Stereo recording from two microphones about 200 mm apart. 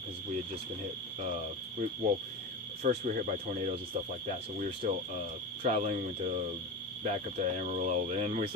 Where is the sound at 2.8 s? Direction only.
40° right (ahead or behind).